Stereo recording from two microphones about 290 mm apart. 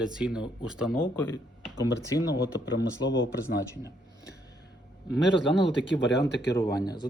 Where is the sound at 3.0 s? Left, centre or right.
Left.